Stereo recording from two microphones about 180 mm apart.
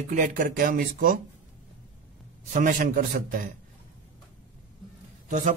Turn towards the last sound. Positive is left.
turn(degrees=-45)  # may be behind; listen again after turning